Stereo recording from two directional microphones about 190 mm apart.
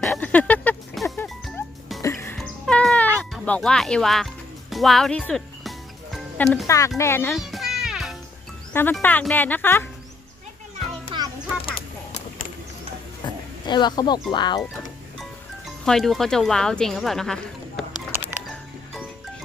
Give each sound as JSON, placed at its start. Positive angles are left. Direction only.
{"t": 0.0, "sound": "music", "side_deg": 5}
{"t": 3.2, "sound": "speech", "side_deg": 5}
{"t": 6.1, "sound": "music", "side_deg": 5}
{"t": 6.7, "sound": "speech", "side_deg": 15}
{"t": 7.3, "sound": "music", "side_deg": 0}
{"t": 8.7, "sound": "speech", "side_deg": 10}
{"t": 13.2, "sound": "a sound", "side_deg": 20}
{"t": 13.7, "sound": "speech", "side_deg": 25}
{"t": 15.8, "sound": "speech", "side_deg": 0}